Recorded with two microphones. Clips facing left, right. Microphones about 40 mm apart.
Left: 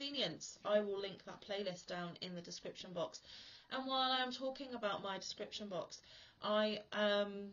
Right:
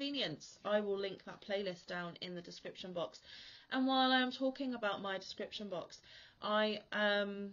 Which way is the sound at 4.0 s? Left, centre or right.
Centre.